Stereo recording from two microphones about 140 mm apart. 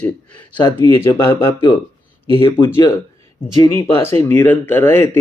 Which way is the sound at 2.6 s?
20° left (ahead or behind).